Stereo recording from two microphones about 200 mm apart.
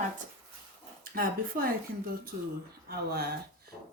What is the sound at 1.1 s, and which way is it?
Speech, 45° right (ahead or behind).